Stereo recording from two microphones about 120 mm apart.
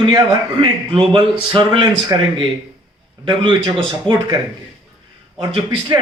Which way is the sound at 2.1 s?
30° right (ahead or behind).